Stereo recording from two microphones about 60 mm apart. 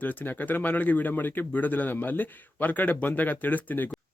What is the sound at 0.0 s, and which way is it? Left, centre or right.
A man's voice, left.